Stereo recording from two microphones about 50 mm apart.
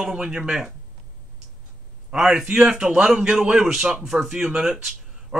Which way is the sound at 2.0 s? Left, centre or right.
Centre.